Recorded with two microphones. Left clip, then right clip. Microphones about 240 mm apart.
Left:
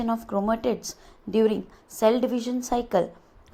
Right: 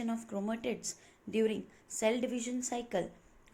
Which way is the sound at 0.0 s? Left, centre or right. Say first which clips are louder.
Left 12 dB; left.